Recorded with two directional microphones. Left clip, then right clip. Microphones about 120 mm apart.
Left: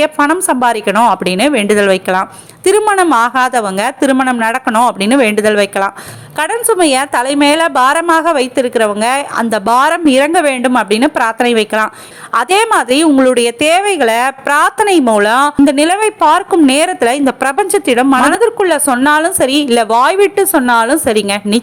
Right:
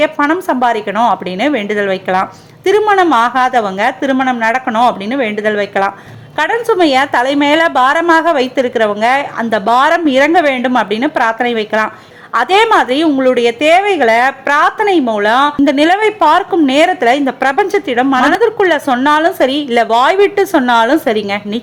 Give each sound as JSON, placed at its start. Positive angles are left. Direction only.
{"t": 0.0, "sound": "a woman's voice", "side_deg": 30}
{"t": 20.5, "sound": "a woman's voice", "side_deg": 20}